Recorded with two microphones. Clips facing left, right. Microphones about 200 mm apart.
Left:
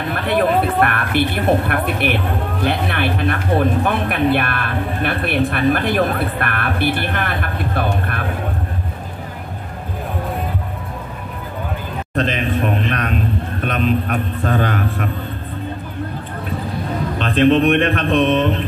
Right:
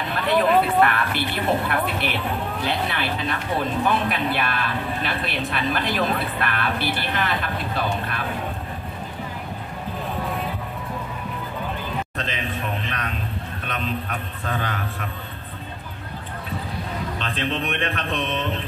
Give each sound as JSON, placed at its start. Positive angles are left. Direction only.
{"t": 0.1, "sound": "speech", "side_deg": 55}
{"t": 12.2, "sound": "a sound", "side_deg": 60}
{"t": 13.7, "sound": "speech", "side_deg": 60}
{"t": 17.2, "sound": "speech", "side_deg": 55}